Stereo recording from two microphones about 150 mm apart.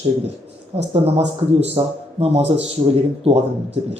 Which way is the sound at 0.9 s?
40° right (ahead or behind).